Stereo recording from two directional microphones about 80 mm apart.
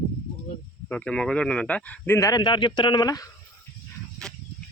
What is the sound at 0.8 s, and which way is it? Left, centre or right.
Speech, centre.